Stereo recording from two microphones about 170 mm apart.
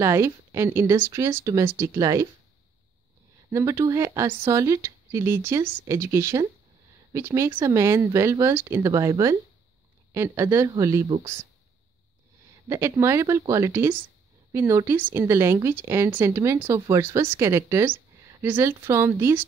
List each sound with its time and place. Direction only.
0.0 s speech: 15° right (ahead or behind)
3.5 s speech: 15° right (ahead or behind)
12.6 s speech: 15° right (ahead or behind)